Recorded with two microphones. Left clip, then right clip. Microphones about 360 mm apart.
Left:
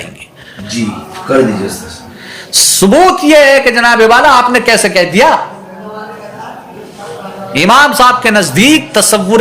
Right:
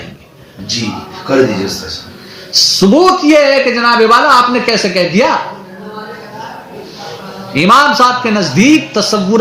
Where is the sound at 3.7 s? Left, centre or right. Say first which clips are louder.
Left 2 dB; centre.